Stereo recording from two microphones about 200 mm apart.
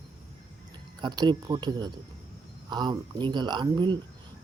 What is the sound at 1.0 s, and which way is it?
Speech, 20° right (ahead or behind).